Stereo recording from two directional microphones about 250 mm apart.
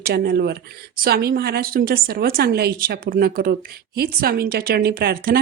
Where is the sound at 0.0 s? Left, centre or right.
Right.